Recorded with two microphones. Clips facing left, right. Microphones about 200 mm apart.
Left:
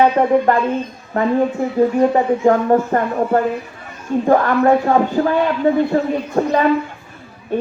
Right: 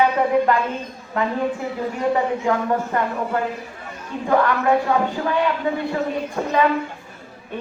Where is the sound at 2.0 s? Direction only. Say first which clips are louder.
Left 6 dB; 45° left (ahead or behind).